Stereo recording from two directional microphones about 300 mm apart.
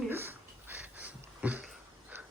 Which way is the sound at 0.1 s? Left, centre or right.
Centre.